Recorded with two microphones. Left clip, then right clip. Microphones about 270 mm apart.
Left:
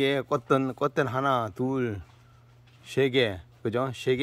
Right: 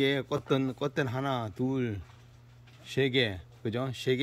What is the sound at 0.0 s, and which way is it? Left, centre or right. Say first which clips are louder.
Speech: left 3 dB; centre.